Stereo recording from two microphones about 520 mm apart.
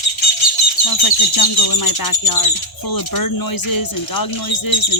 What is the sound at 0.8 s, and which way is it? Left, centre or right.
Bird, left.